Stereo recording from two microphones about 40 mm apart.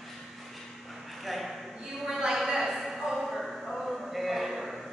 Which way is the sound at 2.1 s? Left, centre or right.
Centre.